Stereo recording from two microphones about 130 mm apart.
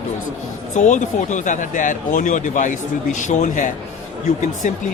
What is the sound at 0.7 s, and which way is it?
Speech, 70° left (ahead or behind).